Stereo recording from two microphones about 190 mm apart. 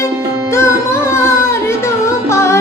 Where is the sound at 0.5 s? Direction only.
15° left (ahead or behind).